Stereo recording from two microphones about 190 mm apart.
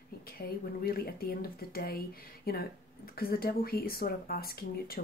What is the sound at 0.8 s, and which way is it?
Speech, 55° left (ahead or behind).